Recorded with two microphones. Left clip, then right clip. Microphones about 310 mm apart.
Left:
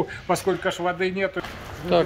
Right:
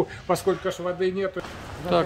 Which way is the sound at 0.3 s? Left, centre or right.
Centre.